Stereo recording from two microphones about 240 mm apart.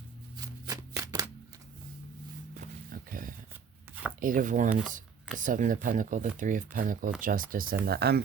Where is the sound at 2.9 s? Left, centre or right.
Right.